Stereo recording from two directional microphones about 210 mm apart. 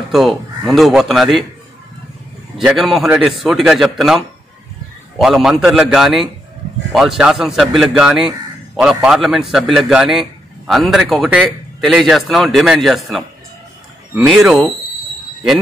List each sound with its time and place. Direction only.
0.1 s a man's voice: centre (ahead or behind)
2.6 s a man's voice: centre (ahead or behind)
5.2 s a man's voice: centre (ahead or behind)